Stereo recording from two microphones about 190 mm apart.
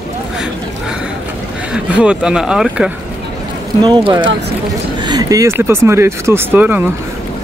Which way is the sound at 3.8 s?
25° right (ahead or behind).